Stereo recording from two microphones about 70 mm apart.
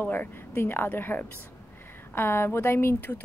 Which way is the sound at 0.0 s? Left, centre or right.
Left.